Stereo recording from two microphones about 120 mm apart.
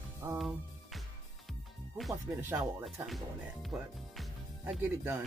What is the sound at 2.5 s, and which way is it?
Speech, centre (ahead or behind).